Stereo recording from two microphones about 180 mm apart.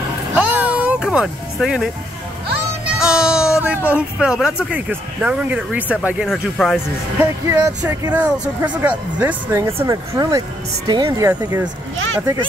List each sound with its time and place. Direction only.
0.3 s music: 10° right (ahead or behind)
3.0 s a sound: 5° right (ahead or behind)
4.6 s speech: 5° right (ahead or behind)
7.4 s speech: 15° right (ahead or behind)